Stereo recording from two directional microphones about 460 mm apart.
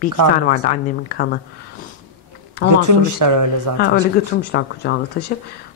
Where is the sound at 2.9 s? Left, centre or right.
Right.